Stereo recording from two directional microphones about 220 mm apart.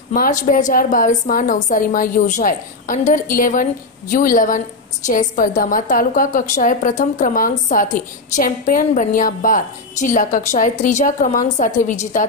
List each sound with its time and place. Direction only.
0.1 s a woman's voice: 35° left (ahead or behind)